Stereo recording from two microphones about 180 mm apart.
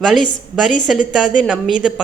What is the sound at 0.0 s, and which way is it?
Speech, centre (ahead or behind).